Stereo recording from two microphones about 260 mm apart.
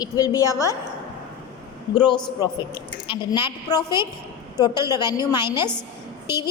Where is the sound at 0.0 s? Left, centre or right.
Centre.